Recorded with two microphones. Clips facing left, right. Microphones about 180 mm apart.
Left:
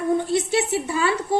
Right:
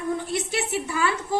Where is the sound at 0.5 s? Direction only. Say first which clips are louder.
Left 5 dB; 25° left (ahead or behind).